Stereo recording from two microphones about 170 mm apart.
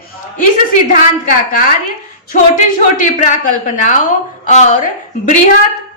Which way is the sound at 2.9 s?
50° left (ahead or behind).